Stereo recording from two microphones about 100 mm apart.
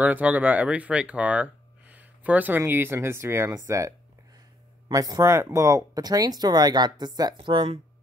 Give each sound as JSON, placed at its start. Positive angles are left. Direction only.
{"t": 0.0, "sound": "speech", "side_deg": -15}
{"t": 4.9, "sound": "speech", "side_deg": -35}
{"t": 7.3, "sound": "speech", "side_deg": -60}